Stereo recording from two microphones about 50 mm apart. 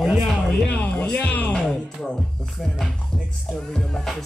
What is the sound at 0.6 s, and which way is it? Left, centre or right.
Speech, left.